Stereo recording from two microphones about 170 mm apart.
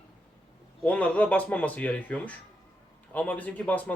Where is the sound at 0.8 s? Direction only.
10° left (ahead or behind).